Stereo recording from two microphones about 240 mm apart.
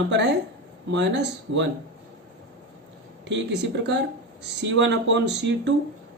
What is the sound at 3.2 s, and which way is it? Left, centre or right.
Speech, right.